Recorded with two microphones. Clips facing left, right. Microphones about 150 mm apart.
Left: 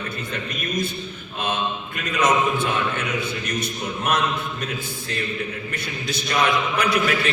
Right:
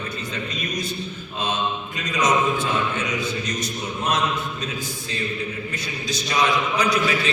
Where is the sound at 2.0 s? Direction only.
55° left (ahead or behind).